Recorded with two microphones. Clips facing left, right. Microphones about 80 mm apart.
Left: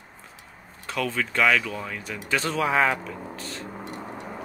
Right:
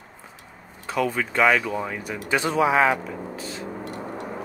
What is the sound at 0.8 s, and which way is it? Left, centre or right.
Speech, centre.